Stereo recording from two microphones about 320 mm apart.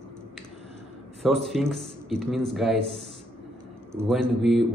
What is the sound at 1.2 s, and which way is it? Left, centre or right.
Speech, centre.